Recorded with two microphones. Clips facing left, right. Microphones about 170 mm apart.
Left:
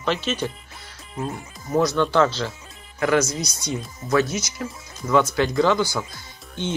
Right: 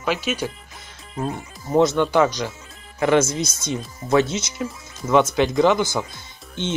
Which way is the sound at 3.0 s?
25° right (ahead or behind).